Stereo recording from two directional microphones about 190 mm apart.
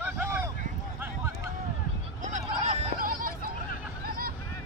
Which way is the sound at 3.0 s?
45° right (ahead or behind).